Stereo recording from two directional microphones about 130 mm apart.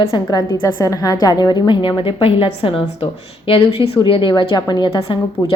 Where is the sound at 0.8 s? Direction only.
30° left (ahead or behind).